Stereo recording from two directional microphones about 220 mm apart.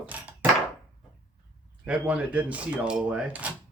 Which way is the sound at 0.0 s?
5° right (ahead or behind).